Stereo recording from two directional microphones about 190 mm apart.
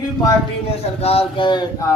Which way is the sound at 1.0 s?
30° left (ahead or behind).